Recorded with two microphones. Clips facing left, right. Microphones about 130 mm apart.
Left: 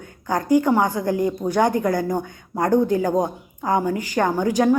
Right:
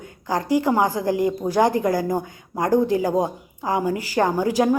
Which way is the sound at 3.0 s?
5° right (ahead or behind).